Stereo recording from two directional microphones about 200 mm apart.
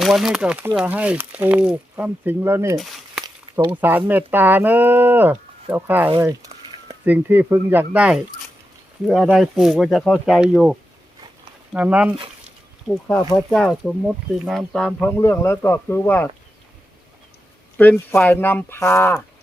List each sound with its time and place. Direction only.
0.0 s speech: centre (ahead or behind)
2.7 s a sound: centre (ahead or behind)
3.7 s speech: 10° right (ahead or behind)
7.0 s speech: 10° right (ahead or behind)
12.1 s a sound: 25° right (ahead or behind)
12.9 s speech: 5° left (ahead or behind)
17.7 s speech: 10° left (ahead or behind)